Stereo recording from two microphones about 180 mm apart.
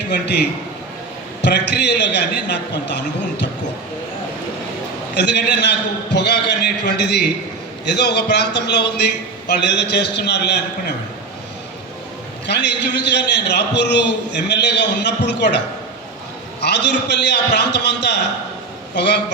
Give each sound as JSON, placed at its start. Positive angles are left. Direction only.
{"t": 1.4, "sound": "a man's voice", "side_deg": 70}
{"t": 5.1, "sound": "a man's voice", "side_deg": 70}
{"t": 12.5, "sound": "a man's voice", "side_deg": 70}